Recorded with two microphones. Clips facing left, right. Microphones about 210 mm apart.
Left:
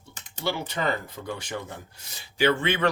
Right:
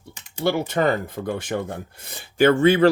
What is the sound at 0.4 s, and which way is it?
Speech, 50° right (ahead or behind).